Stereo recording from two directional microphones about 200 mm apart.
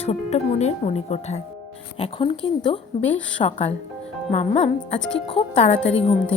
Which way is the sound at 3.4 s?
30° left (ahead or behind).